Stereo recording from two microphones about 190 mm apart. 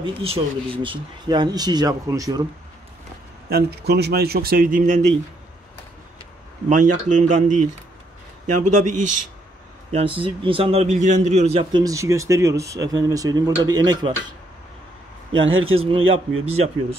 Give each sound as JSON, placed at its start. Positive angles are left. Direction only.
{"t": 0.0, "sound": "speech", "side_deg": -30}
{"t": 3.4, "sound": "speech", "side_deg": -55}
{"t": 6.7, "sound": "a man's voice", "side_deg": -40}
{"t": 9.8, "sound": "a man's voice", "side_deg": -30}
{"t": 11.8, "sound": "speech", "side_deg": -15}
{"t": 15.4, "sound": "speech", "side_deg": -90}
{"t": 16.4, "sound": "a man's voice", "side_deg": -30}